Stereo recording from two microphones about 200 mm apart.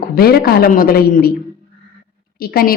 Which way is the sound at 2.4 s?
50° left (ahead or behind).